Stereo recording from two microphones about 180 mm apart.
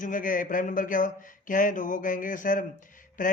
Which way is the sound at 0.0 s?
50° left (ahead or behind).